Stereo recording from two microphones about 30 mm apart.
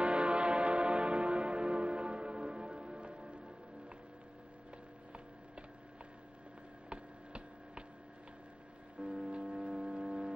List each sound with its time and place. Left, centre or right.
0.0 s music: right
6.9 s a sound: right
9.0 s music: right